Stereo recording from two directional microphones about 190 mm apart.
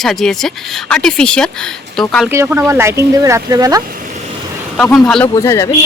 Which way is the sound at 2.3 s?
15° right (ahead or behind).